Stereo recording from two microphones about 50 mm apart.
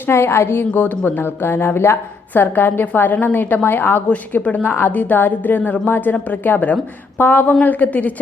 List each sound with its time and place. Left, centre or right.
0.1 s a woman's voice: left
0.6 s a woman's voice: left
4.1 s a woman's voice: left